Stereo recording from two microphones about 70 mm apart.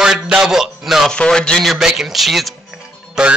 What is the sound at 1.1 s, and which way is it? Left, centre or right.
Speech, centre.